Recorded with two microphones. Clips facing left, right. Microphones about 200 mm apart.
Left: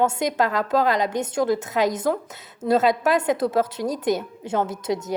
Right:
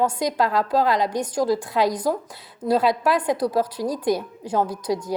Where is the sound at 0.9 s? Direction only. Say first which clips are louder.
Even; 20° left (ahead or behind).